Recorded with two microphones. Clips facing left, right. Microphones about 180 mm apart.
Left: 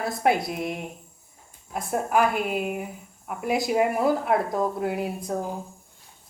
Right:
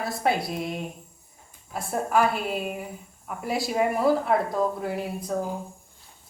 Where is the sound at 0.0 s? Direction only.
20° left (ahead or behind).